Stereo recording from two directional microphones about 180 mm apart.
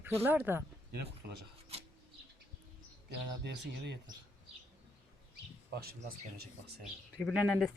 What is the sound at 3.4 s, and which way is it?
Speech, 70° right (ahead or behind).